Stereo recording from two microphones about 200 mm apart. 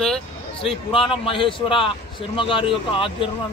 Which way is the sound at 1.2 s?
25° left (ahead or behind).